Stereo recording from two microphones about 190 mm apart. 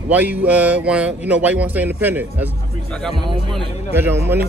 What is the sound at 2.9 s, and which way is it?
Speech, centre (ahead or behind).